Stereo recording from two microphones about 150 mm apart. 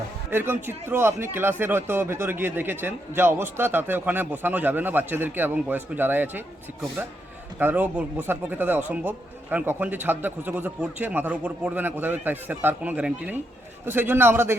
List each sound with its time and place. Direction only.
0.3 s speech: 15° right (ahead or behind)
7.6 s speech: 10° right (ahead or behind)